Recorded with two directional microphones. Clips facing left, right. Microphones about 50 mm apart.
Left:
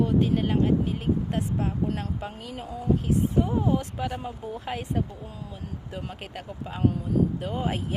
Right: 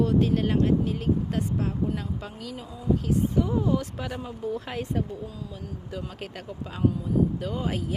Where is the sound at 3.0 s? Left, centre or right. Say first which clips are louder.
Even; left.